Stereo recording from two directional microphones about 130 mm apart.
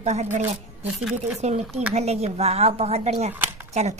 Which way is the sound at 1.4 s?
55° right (ahead or behind).